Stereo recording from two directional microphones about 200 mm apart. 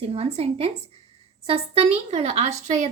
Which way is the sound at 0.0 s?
30° right (ahead or behind).